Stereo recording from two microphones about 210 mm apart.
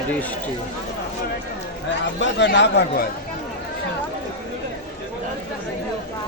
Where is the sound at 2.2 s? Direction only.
55° left (ahead or behind).